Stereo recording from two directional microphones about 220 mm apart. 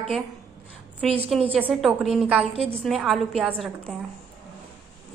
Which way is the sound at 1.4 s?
25° right (ahead or behind).